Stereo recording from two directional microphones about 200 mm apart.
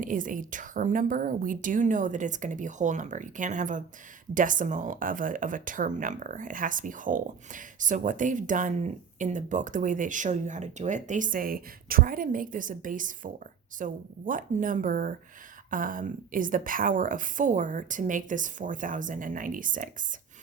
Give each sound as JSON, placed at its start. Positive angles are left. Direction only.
{"t": 0.0, "sound": "speech", "side_deg": -40}